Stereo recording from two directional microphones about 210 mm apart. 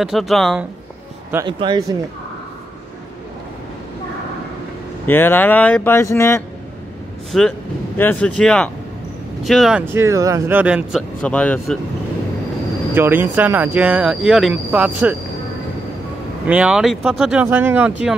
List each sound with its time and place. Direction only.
0.0 s speech: centre (ahead or behind)
1.3 s speech: 20° right (ahead or behind)
5.0 s speech: 10° left (ahead or behind)
7.3 s speech: centre (ahead or behind)
12.9 s speech: 10° right (ahead or behind)
16.4 s speech: 5° right (ahead or behind)